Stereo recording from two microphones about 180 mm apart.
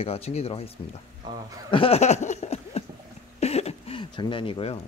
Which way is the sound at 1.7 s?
30° left (ahead or behind).